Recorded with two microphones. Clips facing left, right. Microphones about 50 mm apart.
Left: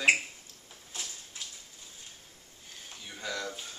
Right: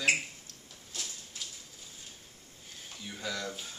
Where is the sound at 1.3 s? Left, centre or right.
Centre.